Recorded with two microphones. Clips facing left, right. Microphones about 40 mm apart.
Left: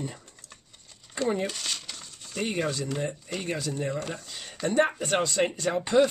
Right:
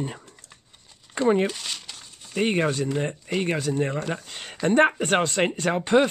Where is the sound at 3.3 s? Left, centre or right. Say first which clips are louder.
Right 8 dB; right.